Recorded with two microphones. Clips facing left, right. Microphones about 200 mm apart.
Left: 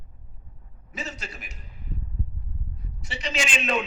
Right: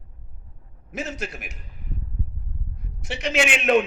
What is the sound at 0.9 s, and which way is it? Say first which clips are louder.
Speech: right 6 dB; 55° right (ahead or behind).